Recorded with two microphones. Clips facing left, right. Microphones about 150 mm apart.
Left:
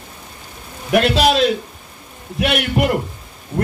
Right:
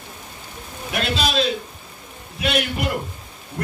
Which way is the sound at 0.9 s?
65° left (ahead or behind).